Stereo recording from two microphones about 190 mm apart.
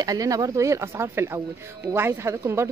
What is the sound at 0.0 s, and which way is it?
Speech, 20° right (ahead or behind).